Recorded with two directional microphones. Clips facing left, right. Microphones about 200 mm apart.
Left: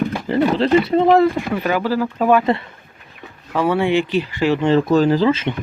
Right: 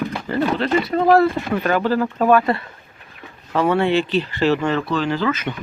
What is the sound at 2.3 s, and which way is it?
Speech, 20° left (ahead or behind).